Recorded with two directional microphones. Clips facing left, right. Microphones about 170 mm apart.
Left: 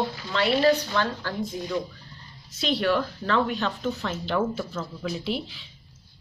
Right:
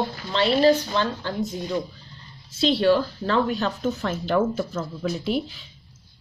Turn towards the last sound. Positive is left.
turn(degrees=-45)  # may be behind; listen again after turning